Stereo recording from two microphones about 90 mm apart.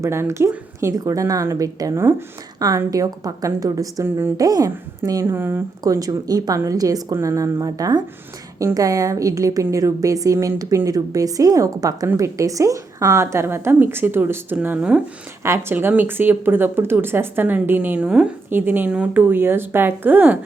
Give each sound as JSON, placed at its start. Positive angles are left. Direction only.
{"t": 0.0, "sound": "a woman's voice", "side_deg": -30}
{"t": 2.0, "sound": "speech", "side_deg": -30}
{"t": 2.6, "sound": "a woman's voice", "side_deg": -40}
{"t": 5.2, "sound": "speech", "side_deg": -25}
{"t": 5.8, "sound": "a woman's voice", "side_deg": -45}
{"t": 15.4, "sound": "speech", "side_deg": -30}
{"t": 18.5, "sound": "speech", "side_deg": -20}
{"t": 19.3, "sound": "speech", "side_deg": -25}